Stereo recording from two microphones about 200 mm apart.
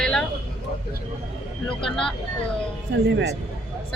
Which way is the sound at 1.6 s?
5° left (ahead or behind).